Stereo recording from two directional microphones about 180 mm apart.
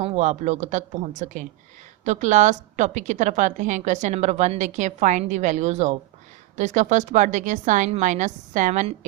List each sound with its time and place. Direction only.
0.0 s a woman's voice: 35° right (ahead or behind)